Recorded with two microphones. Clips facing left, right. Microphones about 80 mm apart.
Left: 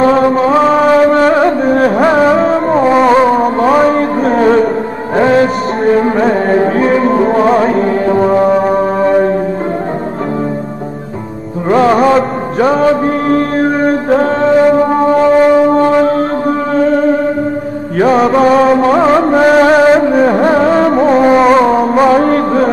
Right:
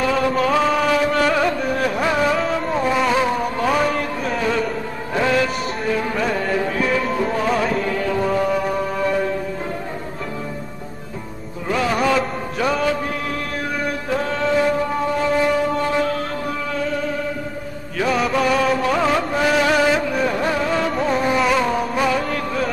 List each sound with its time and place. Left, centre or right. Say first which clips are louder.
0.0 s music: left 10 dB; left
11.7 s music: left 11 dB; left